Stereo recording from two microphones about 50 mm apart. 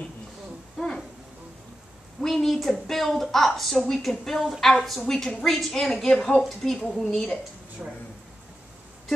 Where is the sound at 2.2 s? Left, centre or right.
Centre.